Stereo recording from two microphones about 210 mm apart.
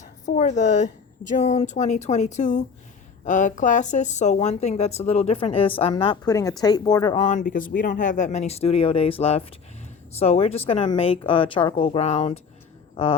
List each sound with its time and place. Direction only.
0.0 s a woman's voice: 35° left (ahead or behind)
7.2 s a woman's voice: 35° left (ahead or behind)